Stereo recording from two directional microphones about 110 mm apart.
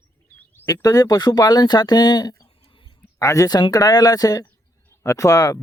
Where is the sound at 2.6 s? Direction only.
50° left (ahead or behind).